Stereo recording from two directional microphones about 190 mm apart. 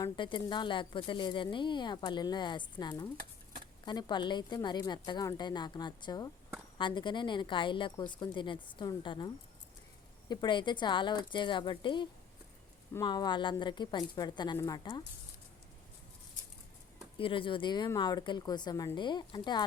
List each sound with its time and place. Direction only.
0.0 s speech: 25° left (ahead or behind)
17.2 s speech: 25° left (ahead or behind)